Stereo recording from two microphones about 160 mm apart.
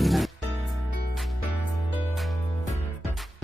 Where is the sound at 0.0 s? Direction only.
Centre (ahead or behind).